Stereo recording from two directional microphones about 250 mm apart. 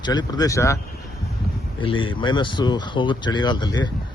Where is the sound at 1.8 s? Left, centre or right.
Centre.